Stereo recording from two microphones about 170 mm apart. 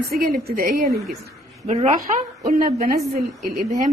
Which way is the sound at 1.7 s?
40° right (ahead or behind).